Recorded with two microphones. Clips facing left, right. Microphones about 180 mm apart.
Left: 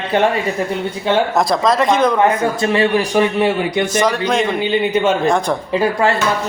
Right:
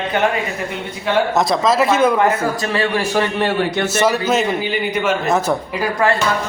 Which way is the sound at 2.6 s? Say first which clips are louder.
Left 4 dB; 25° left (ahead or behind).